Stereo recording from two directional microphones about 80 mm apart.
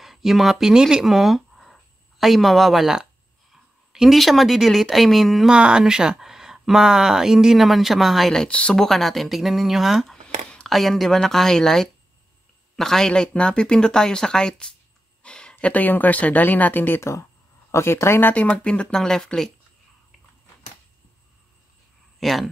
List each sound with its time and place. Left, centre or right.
0.0 s speech: centre
10.2 s a sound: centre
10.7 s speech: centre
15.2 s a sound: centre
15.5 s speech: left
17.0 s speech: left
18.3 s speech: centre
22.2 s speech: centre